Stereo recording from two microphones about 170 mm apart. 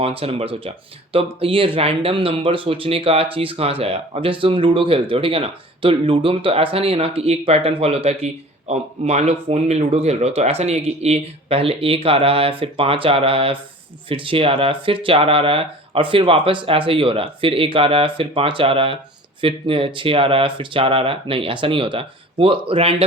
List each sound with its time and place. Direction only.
0.0 s speech: 35° right (ahead or behind)